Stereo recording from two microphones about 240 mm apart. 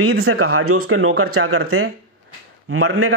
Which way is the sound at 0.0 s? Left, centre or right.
Right.